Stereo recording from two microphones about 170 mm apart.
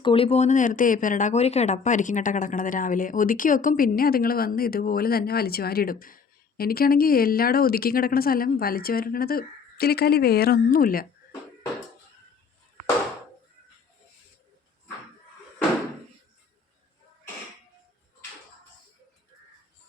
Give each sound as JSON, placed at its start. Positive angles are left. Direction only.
{"t": 0.0, "sound": "speech", "side_deg": 30}